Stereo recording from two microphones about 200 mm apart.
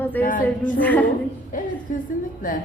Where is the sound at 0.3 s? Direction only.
40° left (ahead or behind).